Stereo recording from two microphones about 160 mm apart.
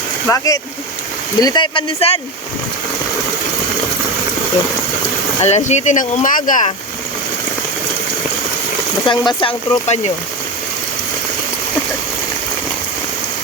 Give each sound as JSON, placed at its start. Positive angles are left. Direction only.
{"t": 0.3, "sound": "speech", "side_deg": 20}
{"t": 5.4, "sound": "speech", "side_deg": 45}
{"t": 9.0, "sound": "speech", "side_deg": 30}